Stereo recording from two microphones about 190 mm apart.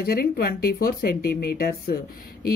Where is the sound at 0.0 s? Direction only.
55° left (ahead or behind).